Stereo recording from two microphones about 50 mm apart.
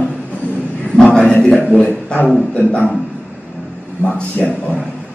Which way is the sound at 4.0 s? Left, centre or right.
Left.